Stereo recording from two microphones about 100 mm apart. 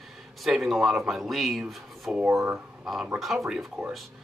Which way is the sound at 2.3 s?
25° right (ahead or behind).